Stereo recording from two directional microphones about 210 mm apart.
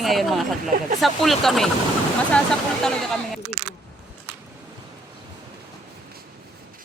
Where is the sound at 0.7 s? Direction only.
45° right (ahead or behind).